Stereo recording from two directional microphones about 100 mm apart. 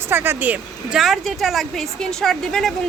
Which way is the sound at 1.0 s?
Centre (ahead or behind).